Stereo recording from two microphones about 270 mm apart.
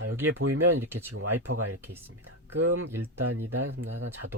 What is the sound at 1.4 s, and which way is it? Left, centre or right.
Speech, right.